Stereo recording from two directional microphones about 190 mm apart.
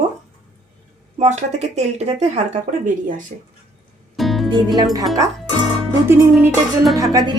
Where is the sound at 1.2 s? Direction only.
35° right (ahead or behind).